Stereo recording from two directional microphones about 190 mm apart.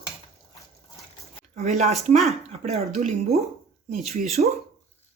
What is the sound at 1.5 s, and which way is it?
Speech, 35° right (ahead or behind).